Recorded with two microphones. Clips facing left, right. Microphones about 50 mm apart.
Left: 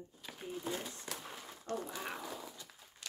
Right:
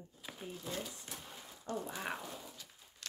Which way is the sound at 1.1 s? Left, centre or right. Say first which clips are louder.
Left 4 dB; left.